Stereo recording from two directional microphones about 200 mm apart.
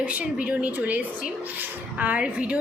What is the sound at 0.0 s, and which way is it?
A woman's voice, 5° right (ahead or behind).